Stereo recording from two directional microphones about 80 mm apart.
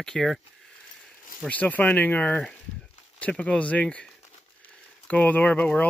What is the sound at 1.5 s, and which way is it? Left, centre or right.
Speech, centre.